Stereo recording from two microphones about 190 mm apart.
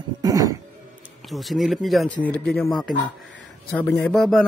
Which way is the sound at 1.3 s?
Centre (ahead or behind).